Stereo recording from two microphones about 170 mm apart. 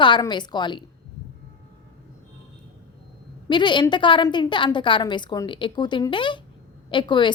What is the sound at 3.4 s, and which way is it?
A woman's voice, 25° left (ahead or behind).